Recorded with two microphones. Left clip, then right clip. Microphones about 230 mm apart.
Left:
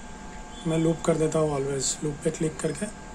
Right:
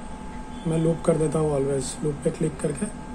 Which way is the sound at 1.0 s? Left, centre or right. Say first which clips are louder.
Right 2 dB; centre.